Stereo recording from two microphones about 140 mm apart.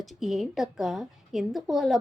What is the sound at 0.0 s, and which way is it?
Speech, centre (ahead or behind).